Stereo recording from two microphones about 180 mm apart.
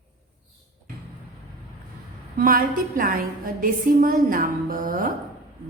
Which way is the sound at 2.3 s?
50° right (ahead or behind).